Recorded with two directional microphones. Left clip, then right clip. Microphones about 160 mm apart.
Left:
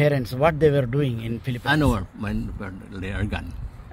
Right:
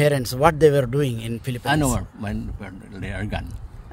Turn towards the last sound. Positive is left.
turn(degrees=-5)  # may be behind; listen again after turning